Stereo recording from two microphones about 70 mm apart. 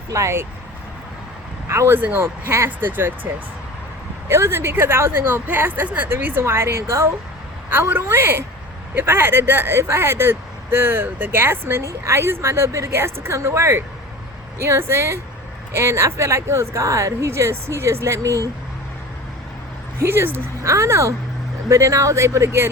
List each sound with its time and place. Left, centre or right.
0.1 s speech: right
1.6 s speech: right
2.0 s speech: right
4.3 s speech: right
20.0 s speech: right
20.6 s speech: right